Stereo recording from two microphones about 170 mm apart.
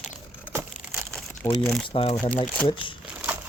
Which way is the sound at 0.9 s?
5° left (ahead or behind).